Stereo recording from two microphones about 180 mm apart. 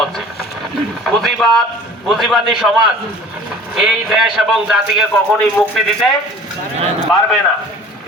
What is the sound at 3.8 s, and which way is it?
A man's voice, 5° right (ahead or behind).